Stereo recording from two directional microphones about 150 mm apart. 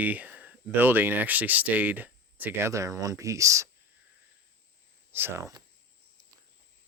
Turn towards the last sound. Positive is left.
turn(degrees=-20)  # may be behind; listen again after turning